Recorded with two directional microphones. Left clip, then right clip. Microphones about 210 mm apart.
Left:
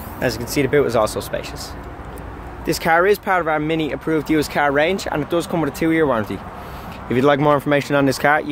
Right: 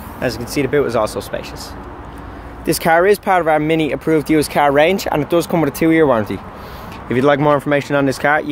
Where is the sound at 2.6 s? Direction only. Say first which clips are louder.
Right 3 dB; 20° right (ahead or behind).